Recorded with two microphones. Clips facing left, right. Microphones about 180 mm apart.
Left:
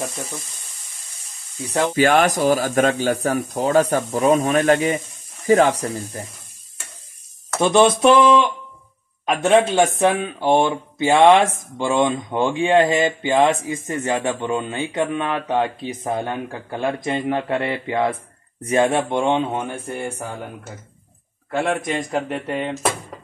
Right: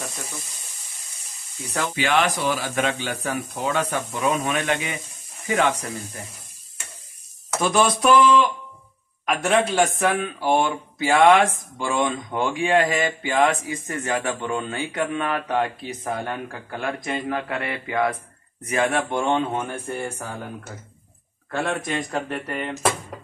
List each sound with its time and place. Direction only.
2.0 s speech: 45° left (ahead or behind)
7.6 s speech: 25° left (ahead or behind)
22.1 s speech: 25° left (ahead or behind)